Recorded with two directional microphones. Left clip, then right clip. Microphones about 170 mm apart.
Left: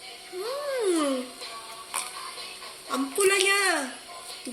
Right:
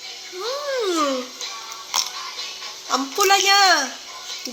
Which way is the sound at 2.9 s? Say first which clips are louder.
Right 6 dB; 15° left (ahead or behind).